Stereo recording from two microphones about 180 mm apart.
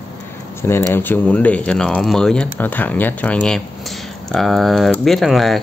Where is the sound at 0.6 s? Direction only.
15° left (ahead or behind).